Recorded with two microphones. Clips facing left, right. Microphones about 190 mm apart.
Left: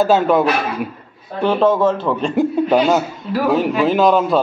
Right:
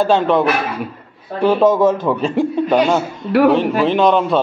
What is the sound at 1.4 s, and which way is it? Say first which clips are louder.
Speech: right 2 dB; 10° right (ahead or behind).